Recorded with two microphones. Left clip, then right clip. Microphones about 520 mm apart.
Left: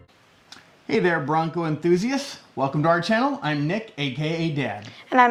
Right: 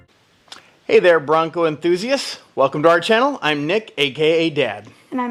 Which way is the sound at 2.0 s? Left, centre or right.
Right.